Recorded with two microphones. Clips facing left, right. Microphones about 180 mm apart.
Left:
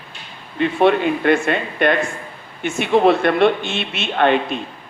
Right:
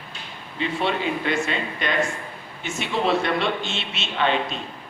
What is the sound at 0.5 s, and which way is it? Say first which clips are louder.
A man's voice: left 9 dB; 55° left (ahead or behind).